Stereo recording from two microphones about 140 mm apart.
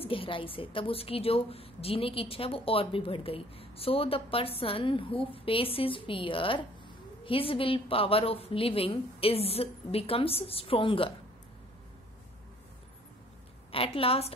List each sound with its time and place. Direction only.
0.0 s a woman's voice: 40° left (ahead or behind)
13.7 s a woman's voice: 40° left (ahead or behind)